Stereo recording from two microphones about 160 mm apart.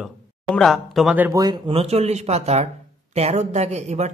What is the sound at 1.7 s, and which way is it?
Speech, 40° right (ahead or behind).